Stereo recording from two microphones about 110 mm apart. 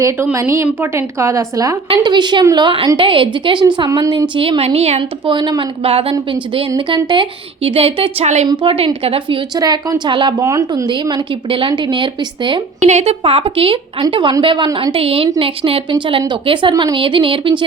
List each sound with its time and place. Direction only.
0.3 s a woman's voice: 25° right (ahead or behind)
1.9 s a woman's voice: 45° right (ahead or behind)
2.8 s a woman's voice: 45° right (ahead or behind)
3.8 s a woman's voice: 35° right (ahead or behind)
4.4 s a woman's voice: 55° right (ahead or behind)
5.2 s a woman's voice: 45° right (ahead or behind)
5.8 s a woman's voice: 60° right (ahead or behind); by 8.4 s 85° right
8.6 s a woman's voice: 55° right (ahead or behind)
9.6 s a woman's voice: 35° right (ahead or behind)
10.1 s a woman's voice: 45° right (ahead or behind)
10.4 s a woman's voice: 30° right (ahead or behind)
11.4 s a woman's voice: 50° right (ahead or behind)
12.8 s a woman's voice: 90° right; by 14.8 s 45° right (ahead or behind)
14.9 s a woman's voice: 60° right (ahead or behind)